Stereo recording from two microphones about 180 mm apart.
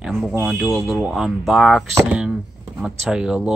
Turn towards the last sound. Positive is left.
turn(degrees=-5)  # may be behind; listen again after turning